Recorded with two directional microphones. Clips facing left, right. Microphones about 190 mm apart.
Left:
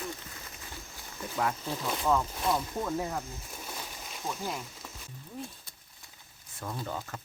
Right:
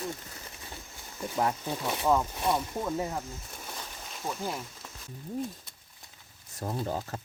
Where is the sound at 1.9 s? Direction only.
15° right (ahead or behind).